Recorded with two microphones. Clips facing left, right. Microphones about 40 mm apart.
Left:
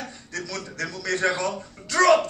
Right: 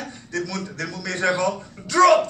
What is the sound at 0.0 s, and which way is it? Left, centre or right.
A man's voice, centre.